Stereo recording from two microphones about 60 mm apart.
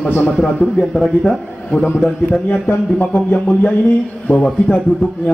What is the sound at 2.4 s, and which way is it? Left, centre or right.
Speech, left.